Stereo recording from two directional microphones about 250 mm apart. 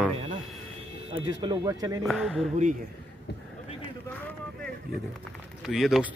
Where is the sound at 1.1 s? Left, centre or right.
Centre.